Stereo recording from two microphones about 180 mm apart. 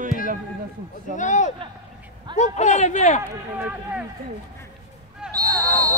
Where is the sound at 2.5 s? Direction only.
40° left (ahead or behind).